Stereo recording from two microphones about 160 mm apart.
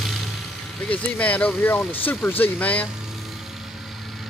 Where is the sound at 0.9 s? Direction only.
10° left (ahead or behind).